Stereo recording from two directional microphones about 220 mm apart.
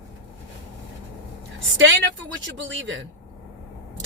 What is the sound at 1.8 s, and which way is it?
A woman's voice, 55° right (ahead or behind).